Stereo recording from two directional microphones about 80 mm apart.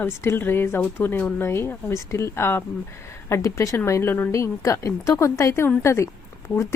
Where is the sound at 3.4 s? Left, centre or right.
Left.